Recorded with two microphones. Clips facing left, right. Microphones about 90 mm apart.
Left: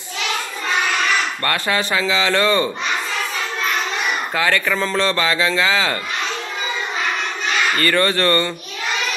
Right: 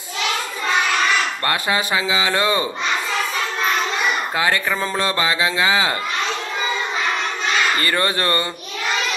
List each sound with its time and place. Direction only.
1.4 s a man's voice: 15° right (ahead or behind)
4.4 s a man's voice: 15° right (ahead or behind)
7.8 s a man's voice: 20° right (ahead or behind)